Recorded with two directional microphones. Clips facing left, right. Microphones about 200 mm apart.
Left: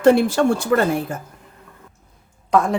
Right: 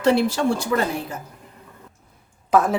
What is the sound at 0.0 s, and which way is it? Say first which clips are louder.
A woman's voice: left 4 dB; 50° left (ahead or behind).